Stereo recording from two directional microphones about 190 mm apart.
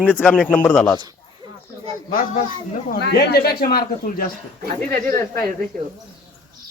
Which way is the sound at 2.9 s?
55° left (ahead or behind).